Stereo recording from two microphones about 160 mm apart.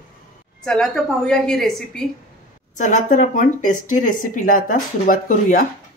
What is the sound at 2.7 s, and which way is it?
Speech, 50° left (ahead or behind).